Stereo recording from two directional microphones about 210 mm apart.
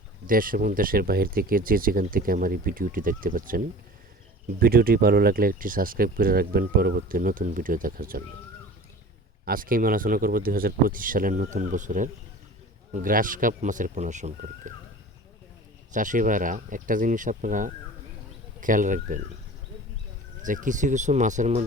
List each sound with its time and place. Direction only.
0.3 s speech: 40° right (ahead or behind)
9.5 s speech: 40° right (ahead or behind)
15.9 s speech: 40° right (ahead or behind)
20.4 s speech: 40° right (ahead or behind)